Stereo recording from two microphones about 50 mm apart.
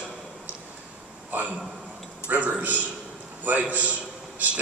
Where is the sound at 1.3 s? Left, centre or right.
Right.